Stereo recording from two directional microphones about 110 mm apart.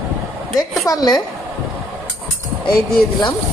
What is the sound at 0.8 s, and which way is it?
Speech, 35° left (ahead or behind).